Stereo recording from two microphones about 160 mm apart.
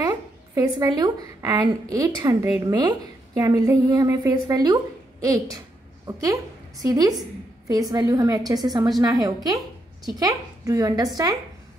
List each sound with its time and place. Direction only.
0.6 s a woman's voice: 25° right (ahead or behind)